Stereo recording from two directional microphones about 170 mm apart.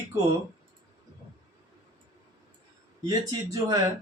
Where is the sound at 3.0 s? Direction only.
20° right (ahead or behind).